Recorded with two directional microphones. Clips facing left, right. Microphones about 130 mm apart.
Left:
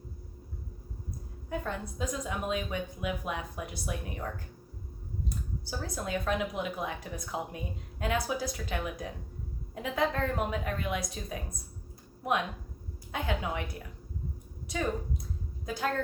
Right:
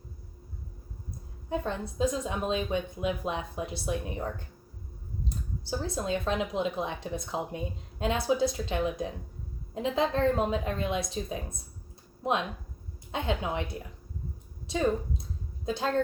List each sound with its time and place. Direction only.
1.5 s a woman's voice: 25° right (ahead or behind)
5.8 s a woman's voice: 25° right (ahead or behind)
15.6 s a woman's voice: 25° right (ahead or behind)